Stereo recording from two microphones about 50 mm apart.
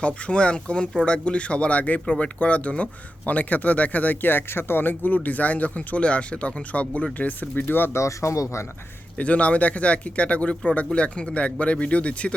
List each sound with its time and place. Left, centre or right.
0.0 s speech: left
7.6 s speech: left
7.9 s speech: left
9.1 s speech: left